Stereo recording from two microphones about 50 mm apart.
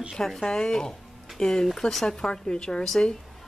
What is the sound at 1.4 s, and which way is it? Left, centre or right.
A woman's voice, centre.